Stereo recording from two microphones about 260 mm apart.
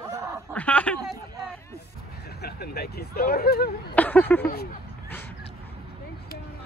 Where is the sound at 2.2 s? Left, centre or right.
Left.